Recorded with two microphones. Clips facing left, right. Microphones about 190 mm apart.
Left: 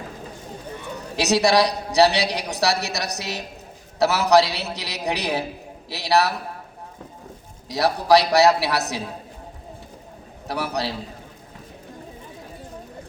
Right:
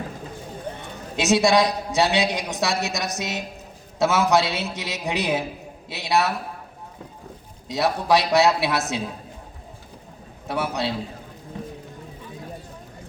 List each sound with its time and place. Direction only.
1.1 s a woman's voice: 35° left (ahead or behind)
7.7 s a woman's voice: 35° left (ahead or behind)
10.5 s a woman's voice: 35° left (ahead or behind)